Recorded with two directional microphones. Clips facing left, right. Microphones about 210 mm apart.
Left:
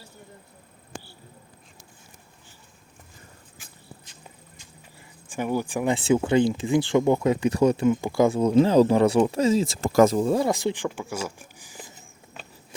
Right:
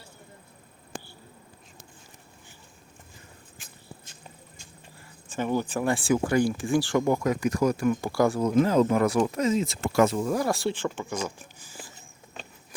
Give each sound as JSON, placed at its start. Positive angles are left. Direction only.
{"t": 5.3, "sound": "speech", "side_deg": 10}
{"t": 10.2, "sound": "speech", "side_deg": 25}